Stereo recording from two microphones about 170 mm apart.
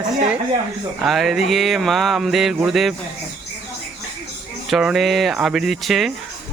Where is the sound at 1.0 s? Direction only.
Centre (ahead or behind).